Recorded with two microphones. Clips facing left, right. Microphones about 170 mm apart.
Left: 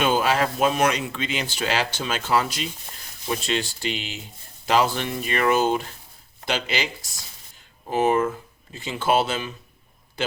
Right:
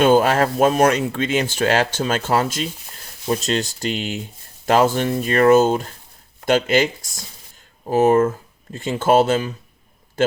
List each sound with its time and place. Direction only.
0.0 s speech: 45° right (ahead or behind)